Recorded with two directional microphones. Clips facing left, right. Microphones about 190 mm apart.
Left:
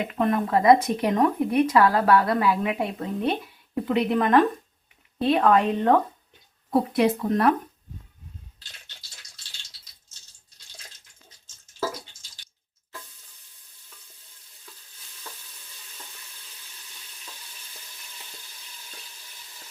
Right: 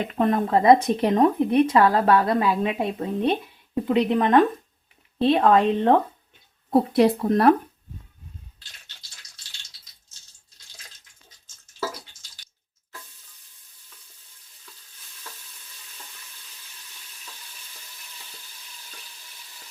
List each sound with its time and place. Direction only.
0.1 s speech: 30° right (ahead or behind)